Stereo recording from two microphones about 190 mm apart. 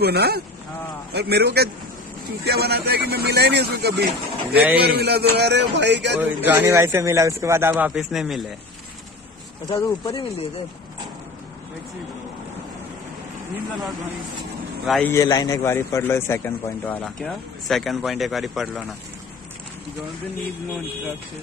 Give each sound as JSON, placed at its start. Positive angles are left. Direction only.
{"t": 0.0, "sound": "a man's voice", "side_deg": -55}
{"t": 6.2, "sound": "speech", "side_deg": -10}
{"t": 9.7, "sound": "speech", "side_deg": 25}
{"t": 14.9, "sound": "a man's voice", "side_deg": 5}
{"t": 15.1, "sound": "a man's voice", "side_deg": 20}